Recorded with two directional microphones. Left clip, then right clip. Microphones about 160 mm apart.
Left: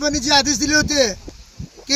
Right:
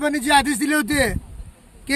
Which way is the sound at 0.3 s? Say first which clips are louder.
Left 1 dB; 15° right (ahead or behind).